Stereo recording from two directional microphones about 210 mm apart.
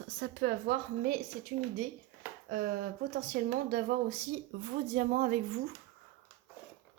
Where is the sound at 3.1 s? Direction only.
45° right (ahead or behind).